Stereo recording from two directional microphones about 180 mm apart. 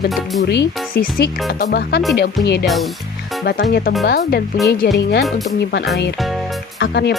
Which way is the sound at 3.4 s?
60° left (ahead or behind).